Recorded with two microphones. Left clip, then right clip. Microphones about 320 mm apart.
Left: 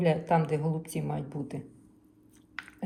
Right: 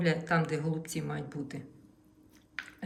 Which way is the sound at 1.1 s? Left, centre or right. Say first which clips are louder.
Left 2 dB; centre.